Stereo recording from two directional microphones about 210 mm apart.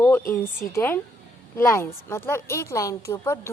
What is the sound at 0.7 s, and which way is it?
A woman's voice, 10° left (ahead or behind).